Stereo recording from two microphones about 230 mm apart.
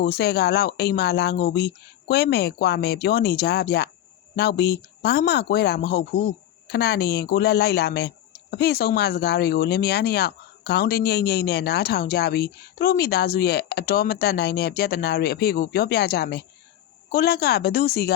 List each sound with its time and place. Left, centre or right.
0.0 s speech: left